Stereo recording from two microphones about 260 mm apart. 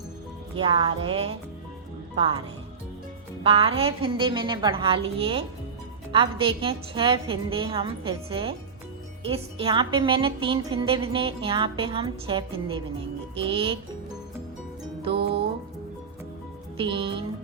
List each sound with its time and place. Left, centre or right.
0.5 s a woman's voice: centre
3.4 s a woman's voice: right
16.7 s a woman's voice: centre